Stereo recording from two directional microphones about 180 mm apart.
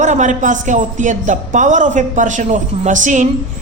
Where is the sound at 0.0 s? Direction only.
40° right (ahead or behind).